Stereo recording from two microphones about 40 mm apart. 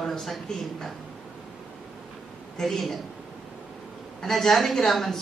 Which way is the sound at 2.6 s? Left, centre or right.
Centre.